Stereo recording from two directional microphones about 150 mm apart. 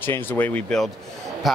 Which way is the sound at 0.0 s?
15° left (ahead or behind).